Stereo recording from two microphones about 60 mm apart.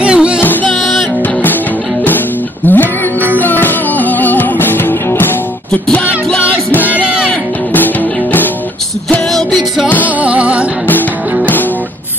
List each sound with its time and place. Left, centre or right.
0.0 s music: centre
0.4 s music: left
0.7 s music: centre
1.2 s music: left
5.7 s music: centre
6.4 s music: left
9.3 s music: centre
10.0 s flamenco: right